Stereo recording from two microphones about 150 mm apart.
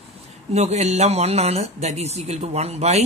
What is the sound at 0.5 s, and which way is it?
Speech, 50° right (ahead or behind).